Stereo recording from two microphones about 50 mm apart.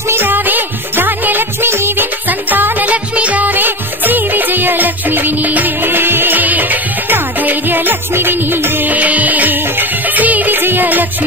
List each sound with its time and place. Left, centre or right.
0.1 s music of bollywood: right
1.7 s music: right
2.2 s music: right
8.9 s music: right